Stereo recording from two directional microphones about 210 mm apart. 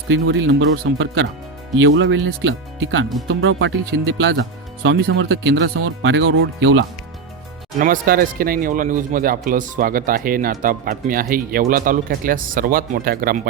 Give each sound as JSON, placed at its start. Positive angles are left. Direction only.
{"t": 0.1, "sound": "speech", "side_deg": -65}
{"t": 7.8, "sound": "speech", "side_deg": -40}